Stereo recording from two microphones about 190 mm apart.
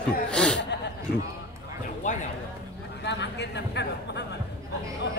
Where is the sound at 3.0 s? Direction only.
65° left (ahead or behind).